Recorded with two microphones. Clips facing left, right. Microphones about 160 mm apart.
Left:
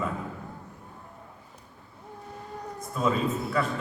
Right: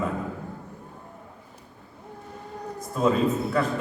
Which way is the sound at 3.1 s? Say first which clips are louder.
Right 4 dB; 35° right (ahead or behind).